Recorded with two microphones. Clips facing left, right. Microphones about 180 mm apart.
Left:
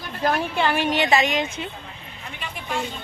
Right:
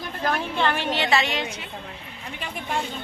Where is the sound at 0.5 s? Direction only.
10° left (ahead or behind).